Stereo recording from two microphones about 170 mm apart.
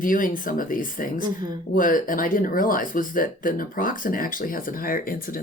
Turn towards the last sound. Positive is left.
turn(degrees=55)  # may be behind; listen again after turning